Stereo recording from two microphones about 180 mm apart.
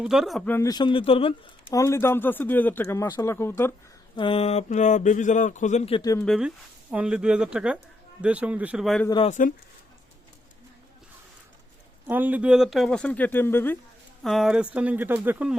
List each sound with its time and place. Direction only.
0.0 s speech: centre (ahead or behind)
0.7 s speech: 25° left (ahead or behind)
1.7 s speech: 15° left (ahead or behind)
4.1 s speech: 30° left (ahead or behind)
6.0 s speech: 20° left (ahead or behind)
6.2 s speech: centre (ahead or behind)
9.0 s speech: 25° left (ahead or behind)
12.0 s speech: 10° right (ahead or behind); by 13.7 s 10° left (ahead or behind)
14.3 s speech: centre (ahead or behind)